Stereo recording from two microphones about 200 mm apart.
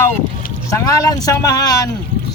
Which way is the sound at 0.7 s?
15° left (ahead or behind).